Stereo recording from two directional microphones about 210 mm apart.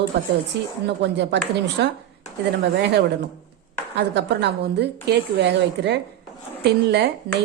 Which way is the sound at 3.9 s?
55° right (ahead or behind).